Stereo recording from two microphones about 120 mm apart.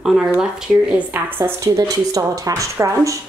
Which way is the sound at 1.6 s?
30° right (ahead or behind).